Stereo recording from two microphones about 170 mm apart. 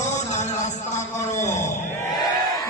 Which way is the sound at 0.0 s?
45° left (ahead or behind).